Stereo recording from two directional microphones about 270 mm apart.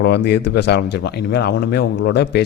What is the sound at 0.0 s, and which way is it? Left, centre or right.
Speech, left.